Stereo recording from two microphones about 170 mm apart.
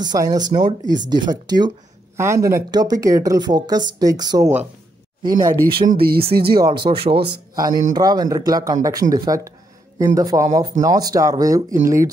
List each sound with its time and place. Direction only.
0.0 s speech: 25° right (ahead or behind)
5.9 s speech: 60° right (ahead or behind)
6.4 s speech: 25° right (ahead or behind)
7.5 s speech: 20° right (ahead or behind)